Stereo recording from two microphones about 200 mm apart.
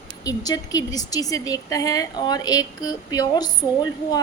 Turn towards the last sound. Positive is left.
turn(degrees=20)  # may be behind; listen again after turning